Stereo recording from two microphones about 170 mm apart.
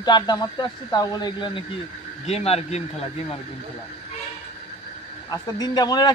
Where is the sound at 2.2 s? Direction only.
35° left (ahead or behind).